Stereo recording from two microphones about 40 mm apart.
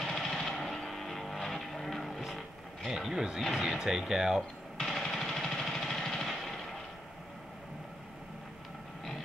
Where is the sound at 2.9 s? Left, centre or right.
Centre.